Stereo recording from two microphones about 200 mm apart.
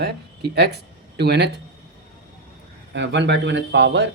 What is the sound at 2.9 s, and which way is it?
Speech, 60° right (ahead or behind).